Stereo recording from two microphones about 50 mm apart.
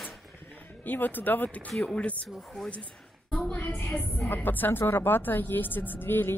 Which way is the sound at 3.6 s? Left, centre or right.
Left.